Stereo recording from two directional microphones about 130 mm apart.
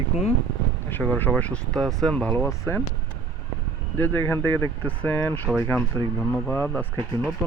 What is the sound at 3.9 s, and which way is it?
Speech, 20° left (ahead or behind).